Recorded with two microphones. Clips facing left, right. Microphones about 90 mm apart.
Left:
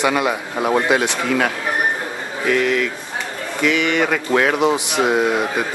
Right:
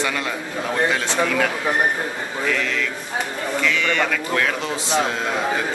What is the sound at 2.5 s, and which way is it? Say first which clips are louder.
Speech: left 6 dB; 15° left (ahead or behind).